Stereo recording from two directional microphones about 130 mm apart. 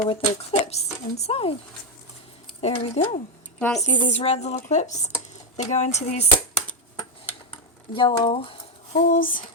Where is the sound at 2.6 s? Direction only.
55° left (ahead or behind).